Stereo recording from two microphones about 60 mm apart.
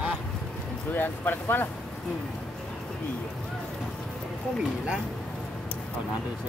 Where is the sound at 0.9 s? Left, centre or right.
Left.